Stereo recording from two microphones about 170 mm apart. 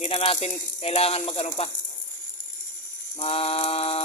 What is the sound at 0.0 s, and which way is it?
Speech, 35° left (ahead or behind).